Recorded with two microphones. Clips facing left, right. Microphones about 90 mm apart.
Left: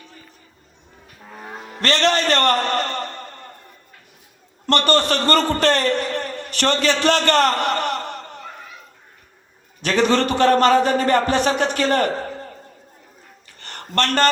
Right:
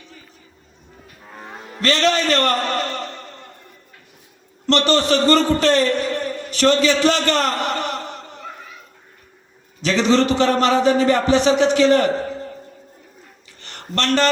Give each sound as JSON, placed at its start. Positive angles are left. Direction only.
{"t": 1.8, "sound": "a man's voice", "side_deg": 55}
{"t": 4.6, "sound": "a man's voice", "side_deg": 50}
{"t": 9.8, "sound": "a man's voice", "side_deg": 50}
{"t": 13.6, "sound": "a sound", "side_deg": 55}